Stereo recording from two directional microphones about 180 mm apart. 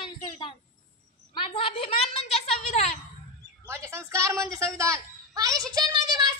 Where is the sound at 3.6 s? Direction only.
15° right (ahead or behind).